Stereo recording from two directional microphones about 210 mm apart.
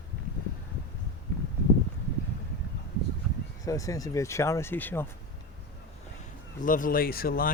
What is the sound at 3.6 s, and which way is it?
Speech, 15° left (ahead or behind).